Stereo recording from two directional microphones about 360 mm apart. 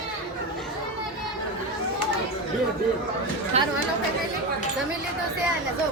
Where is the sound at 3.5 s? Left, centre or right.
Centre.